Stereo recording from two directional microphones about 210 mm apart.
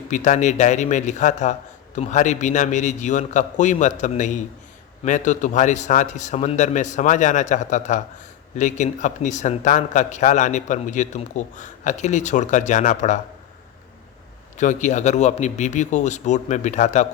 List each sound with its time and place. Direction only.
0.1 s a man's voice: 35° left (ahead or behind)
14.6 s a man's voice: 35° left (ahead or behind)